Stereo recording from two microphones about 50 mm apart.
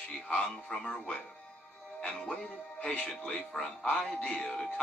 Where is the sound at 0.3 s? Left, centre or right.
Centre.